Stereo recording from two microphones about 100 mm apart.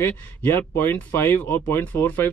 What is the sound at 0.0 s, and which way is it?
Speech, 20° left (ahead or behind).